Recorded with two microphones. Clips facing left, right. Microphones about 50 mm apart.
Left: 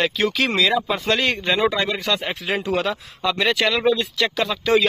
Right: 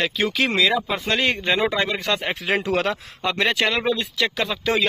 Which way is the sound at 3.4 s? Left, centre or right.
Right.